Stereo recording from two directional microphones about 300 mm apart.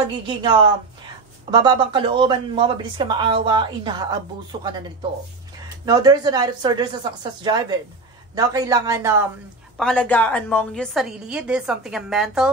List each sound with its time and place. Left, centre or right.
0.3 s speech: centre
5.9 s speech: centre
9.8 s a woman's voice: centre